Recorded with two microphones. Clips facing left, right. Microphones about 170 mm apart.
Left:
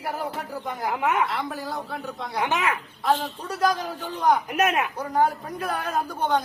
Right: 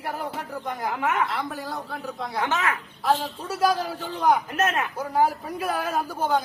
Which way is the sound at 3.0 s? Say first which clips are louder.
Right 1 dB; centre (ahead or behind).